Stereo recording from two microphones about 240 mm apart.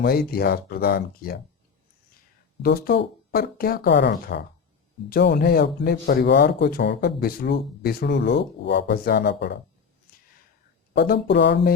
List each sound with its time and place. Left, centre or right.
0.0 s speech: left
2.6 s speech: left
10.9 s speech: left